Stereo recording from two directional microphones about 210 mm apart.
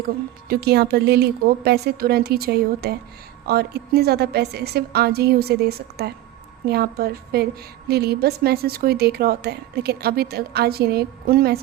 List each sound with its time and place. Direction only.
0.4 s a woman's voice: 50° right (ahead or behind)